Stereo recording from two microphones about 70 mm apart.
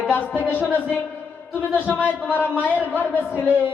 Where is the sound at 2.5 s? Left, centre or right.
Right.